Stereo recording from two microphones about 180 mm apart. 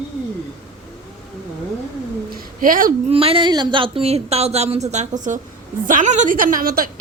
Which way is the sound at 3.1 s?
30° right (ahead or behind).